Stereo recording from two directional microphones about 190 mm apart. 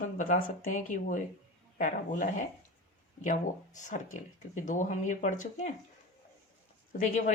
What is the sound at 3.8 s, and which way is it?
Speech, 40° left (ahead or behind).